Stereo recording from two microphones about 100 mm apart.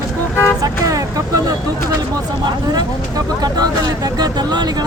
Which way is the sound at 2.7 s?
40° right (ahead or behind).